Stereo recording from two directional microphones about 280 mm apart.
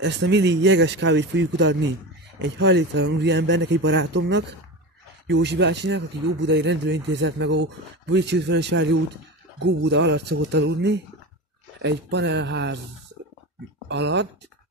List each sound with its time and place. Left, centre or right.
0.0 s speech: right
13.8 s speech: right